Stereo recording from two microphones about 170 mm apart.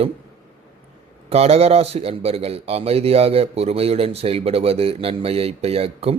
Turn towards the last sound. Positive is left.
turn(degrees=-35)  # may be behind; listen again after turning